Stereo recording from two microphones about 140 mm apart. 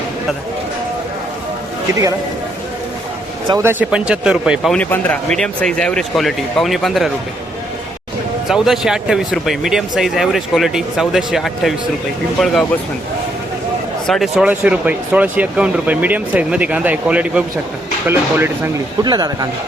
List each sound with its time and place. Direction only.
3.6 s speech: 15° right (ahead or behind)
4.7 s speech: 10° left (ahead or behind)
8.4 s speech: centre (ahead or behind)
14.1 s speech: centre (ahead or behind)
19.0 s speech: 30° right (ahead or behind)